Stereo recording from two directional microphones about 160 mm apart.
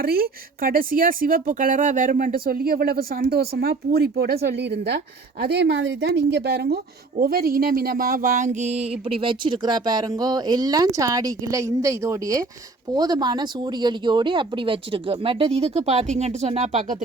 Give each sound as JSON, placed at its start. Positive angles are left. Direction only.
{"t": 0.0, "sound": "a woman's voice", "side_deg": -70}
{"t": 7.2, "sound": "speech", "side_deg": -75}